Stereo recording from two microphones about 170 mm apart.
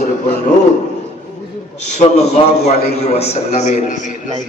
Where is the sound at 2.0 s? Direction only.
40° left (ahead or behind).